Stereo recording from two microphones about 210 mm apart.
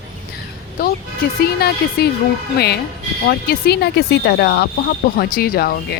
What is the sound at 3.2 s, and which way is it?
Speech, 50° left (ahead or behind).